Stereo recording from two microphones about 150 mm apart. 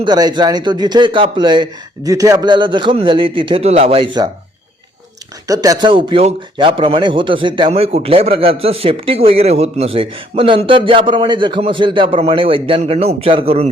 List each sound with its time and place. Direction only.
0.0 s speech: 30° right (ahead or behind)
5.5 s speech: 25° right (ahead or behind); by 13.7 s 40° right (ahead or behind)